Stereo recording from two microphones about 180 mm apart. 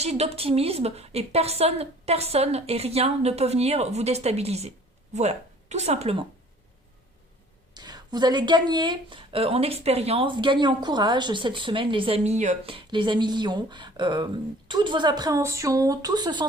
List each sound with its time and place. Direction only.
0.0 s a woman's voice: 35° right (ahead or behind)
7.7 s speech: 25° right (ahead or behind)